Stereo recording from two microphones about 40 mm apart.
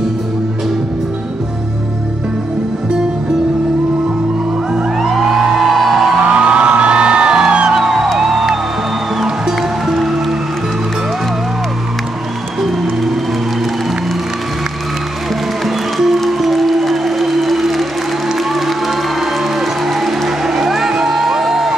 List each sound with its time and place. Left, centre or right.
4.9 s music: centre
6.3 s music: right
8.2 s music: centre
15.6 s music: centre